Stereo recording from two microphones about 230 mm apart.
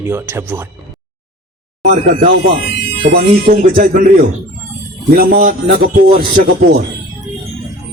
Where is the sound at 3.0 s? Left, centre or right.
Right.